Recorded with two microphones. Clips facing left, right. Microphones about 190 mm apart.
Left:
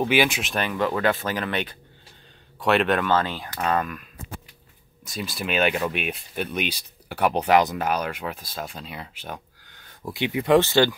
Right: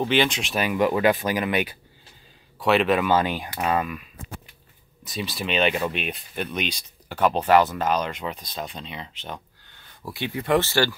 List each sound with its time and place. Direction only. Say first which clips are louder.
0.0 s speech: left 1 dB; 10° left (ahead or behind)